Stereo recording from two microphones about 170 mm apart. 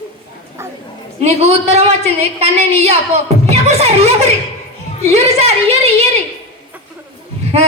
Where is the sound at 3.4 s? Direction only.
40° right (ahead or behind).